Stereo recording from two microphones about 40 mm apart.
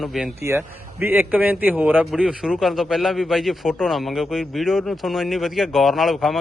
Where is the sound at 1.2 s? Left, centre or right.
Right.